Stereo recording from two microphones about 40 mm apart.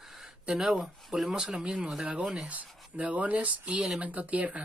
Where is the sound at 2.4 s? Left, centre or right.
Right.